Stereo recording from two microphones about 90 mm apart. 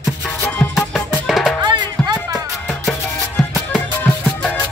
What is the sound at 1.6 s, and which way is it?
Music, 55° right (ahead or behind).